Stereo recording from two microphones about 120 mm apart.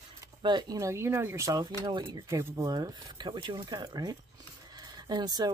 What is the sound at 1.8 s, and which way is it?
Speech, 40° right (ahead or behind).